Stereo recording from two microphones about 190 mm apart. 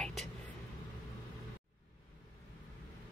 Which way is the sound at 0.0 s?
Centre (ahead or behind).